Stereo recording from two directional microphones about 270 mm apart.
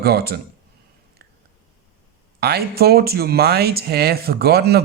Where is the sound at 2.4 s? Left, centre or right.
Right.